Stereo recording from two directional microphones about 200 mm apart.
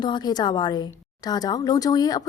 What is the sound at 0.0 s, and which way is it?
Speech, 20° left (ahead or behind).